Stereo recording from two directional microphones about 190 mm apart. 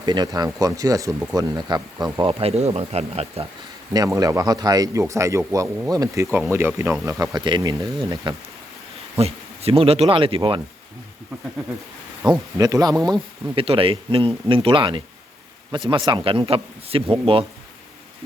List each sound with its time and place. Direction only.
0.0 s speech: 20° right (ahead or behind)
2.4 s speech: 35° right (ahead or behind)
3.9 s speech: 20° right (ahead or behind)
9.1 s speech: 30° right (ahead or behind)
12.2 s speech: 20° right (ahead or behind)